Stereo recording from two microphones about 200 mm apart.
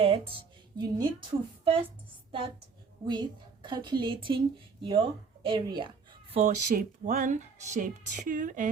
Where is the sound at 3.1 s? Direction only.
25° right (ahead or behind).